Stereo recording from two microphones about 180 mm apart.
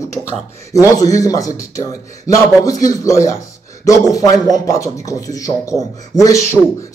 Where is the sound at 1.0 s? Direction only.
20° left (ahead or behind).